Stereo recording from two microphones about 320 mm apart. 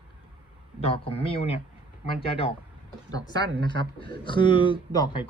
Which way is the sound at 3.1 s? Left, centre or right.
Centre.